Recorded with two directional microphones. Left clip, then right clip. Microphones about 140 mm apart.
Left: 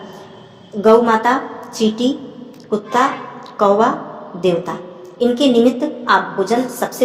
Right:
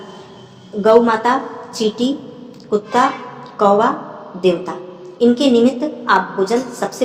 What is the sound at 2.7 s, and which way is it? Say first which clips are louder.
A woman's voice: right 1 dB; 35° left (ahead or behind).